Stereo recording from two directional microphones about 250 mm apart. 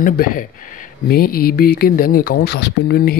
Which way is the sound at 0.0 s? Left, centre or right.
Left.